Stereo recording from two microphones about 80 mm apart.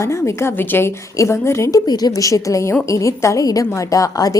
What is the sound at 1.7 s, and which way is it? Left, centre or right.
A woman's voice, left.